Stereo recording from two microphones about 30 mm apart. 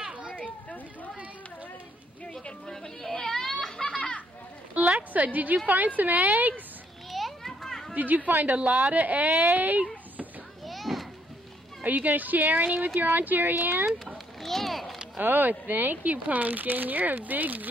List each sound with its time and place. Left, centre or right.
0.3 s chatter: left
2.7 s baby cry: centre
3.8 s children playing: centre
4.8 s a sound: right
5.1 s a woman's voice: right
7.1 s children playing: centre
7.9 s speech: right
8.3 s speech: right
8.6 s a woman's voice: right
10.6 s children playing: centre
11.8 s speech: right
14.4 s a sound: centre
15.1 s speech: right